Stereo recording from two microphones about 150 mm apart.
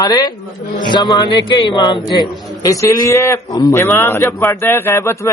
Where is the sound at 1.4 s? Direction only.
35° left (ahead or behind).